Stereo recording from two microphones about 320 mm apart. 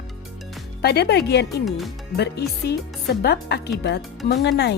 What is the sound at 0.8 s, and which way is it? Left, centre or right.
A woman's voice, left.